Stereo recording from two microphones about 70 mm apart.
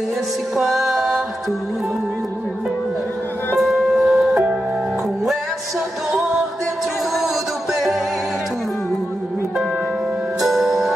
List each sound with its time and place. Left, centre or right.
0.6 s music: centre
3.5 s music: centre
10.4 s music: centre